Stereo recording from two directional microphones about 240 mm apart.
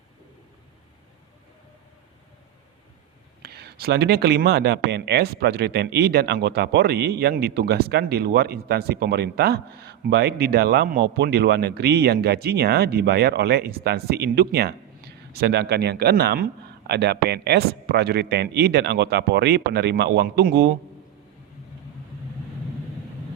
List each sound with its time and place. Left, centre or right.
3.4 s speech: right